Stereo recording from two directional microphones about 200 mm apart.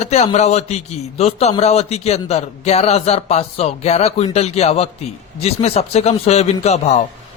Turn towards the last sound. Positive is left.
turn(degrees=35)  # may be behind; listen again after turning